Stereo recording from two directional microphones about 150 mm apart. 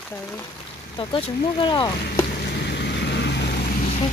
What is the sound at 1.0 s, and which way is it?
Speech, 35° left (ahead or behind).